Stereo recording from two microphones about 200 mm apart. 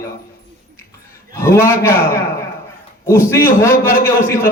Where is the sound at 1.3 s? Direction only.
15° left (ahead or behind).